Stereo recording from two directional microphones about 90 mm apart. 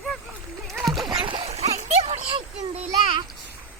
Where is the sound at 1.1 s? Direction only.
60° right (ahead or behind).